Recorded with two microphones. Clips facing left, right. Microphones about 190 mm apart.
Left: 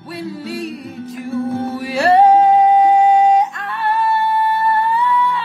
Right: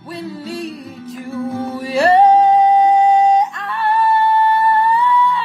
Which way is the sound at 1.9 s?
10° left (ahead or behind).